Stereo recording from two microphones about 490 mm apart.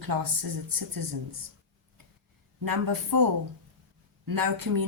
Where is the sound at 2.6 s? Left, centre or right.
Right.